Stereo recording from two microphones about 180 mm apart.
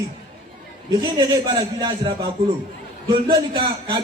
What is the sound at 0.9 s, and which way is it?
A man's voice, 20° right (ahead or behind).